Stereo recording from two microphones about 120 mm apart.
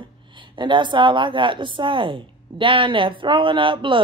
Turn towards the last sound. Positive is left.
turn(degrees=-45)  # may be behind; listen again after turning